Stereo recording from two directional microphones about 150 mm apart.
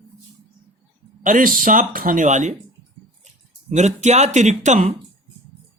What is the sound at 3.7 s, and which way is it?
Speech, 50° right (ahead or behind).